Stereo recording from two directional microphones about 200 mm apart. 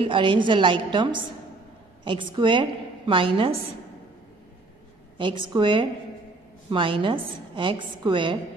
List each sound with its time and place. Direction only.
0.0 s a woman's voice: 25° right (ahead or behind)
5.1 s a woman's voice: 25° right (ahead or behind)